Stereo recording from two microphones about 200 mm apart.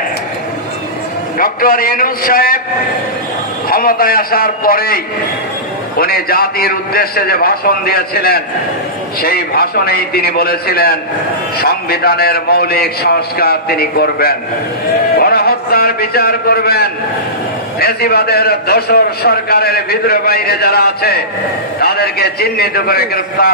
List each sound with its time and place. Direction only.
1.4 s a man's voice: 45° left (ahead or behind)
3.6 s a man's voice: 45° left (ahead or behind)